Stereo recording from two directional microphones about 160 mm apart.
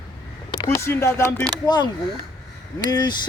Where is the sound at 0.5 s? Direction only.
25° left (ahead or behind).